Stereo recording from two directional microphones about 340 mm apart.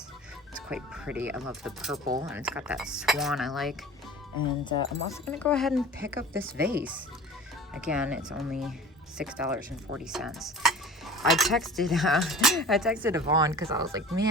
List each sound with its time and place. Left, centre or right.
0.7 s cutlery: centre
4.9 s cutlery: centre
6.4 s speech: right
7.7 s cutlery: centre